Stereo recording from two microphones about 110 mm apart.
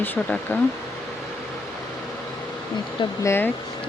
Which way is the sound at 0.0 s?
20° left (ahead or behind).